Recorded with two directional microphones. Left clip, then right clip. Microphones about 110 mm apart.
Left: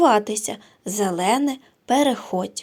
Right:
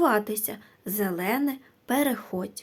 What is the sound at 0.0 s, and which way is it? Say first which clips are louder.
A woman's voice: left 7 dB; 25° left (ahead or behind).